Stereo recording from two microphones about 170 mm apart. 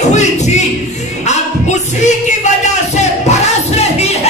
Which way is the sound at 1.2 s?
40° left (ahead or behind).